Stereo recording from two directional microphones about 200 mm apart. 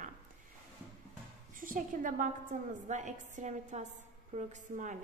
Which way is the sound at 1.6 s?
40° right (ahead or behind).